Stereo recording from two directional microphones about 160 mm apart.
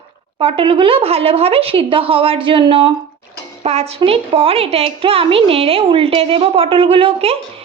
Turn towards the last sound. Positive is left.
turn(degrees=-35)  # may be behind; listen again after turning